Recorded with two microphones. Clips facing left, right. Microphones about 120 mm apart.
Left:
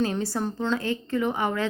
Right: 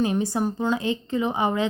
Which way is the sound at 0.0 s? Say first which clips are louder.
Right 3 dB; 15° right (ahead or behind).